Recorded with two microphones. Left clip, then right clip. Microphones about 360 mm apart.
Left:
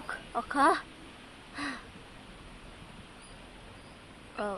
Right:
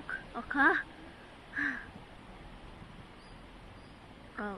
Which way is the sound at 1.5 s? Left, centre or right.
Centre.